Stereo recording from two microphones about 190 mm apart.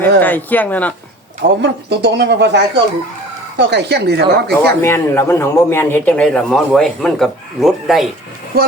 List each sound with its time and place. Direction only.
0.2 s speech: 10° left (ahead or behind)
1.4 s speech: 60° right (ahead or behind)
4.6 s a man's voice: 15° left (ahead or behind)